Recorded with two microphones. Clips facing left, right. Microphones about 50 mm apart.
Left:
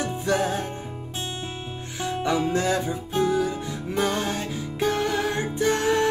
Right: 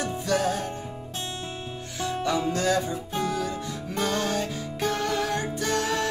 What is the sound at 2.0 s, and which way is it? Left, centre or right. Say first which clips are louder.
Music: left 2 dB; left.